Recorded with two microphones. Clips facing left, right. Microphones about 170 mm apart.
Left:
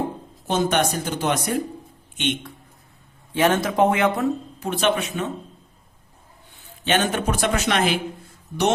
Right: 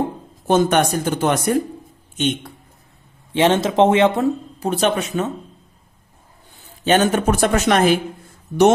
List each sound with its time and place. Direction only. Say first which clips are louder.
0.4 s speech: right 5 dB; 50° right (ahead or behind)
2.1 s speech: right 4 dB; 40° right (ahead or behind)
3.3 s speech: right 4 dB; 25° right (ahead or behind)
6.8 s speech: right 6 dB; 40° right (ahead or behind)